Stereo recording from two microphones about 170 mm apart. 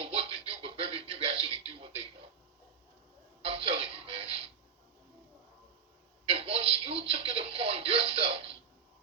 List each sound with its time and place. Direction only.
0.0 s music: 35° right (ahead or behind)
3.4 s music: 35° right (ahead or behind)
6.2 s a sound: 35° right (ahead or behind)